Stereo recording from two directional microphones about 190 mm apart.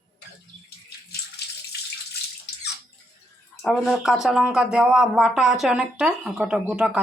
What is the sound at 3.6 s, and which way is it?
Speech, centre (ahead or behind).